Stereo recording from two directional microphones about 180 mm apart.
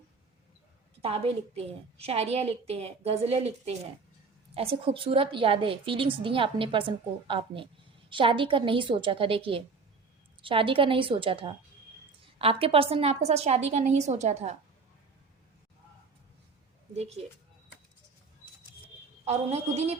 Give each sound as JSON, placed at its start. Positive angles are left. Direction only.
{"t": 1.0, "sound": "a woman's voice", "side_deg": -35}
{"t": 16.9, "sound": "a woman's voice", "side_deg": -35}
{"t": 19.3, "sound": "a woman's voice", "side_deg": -35}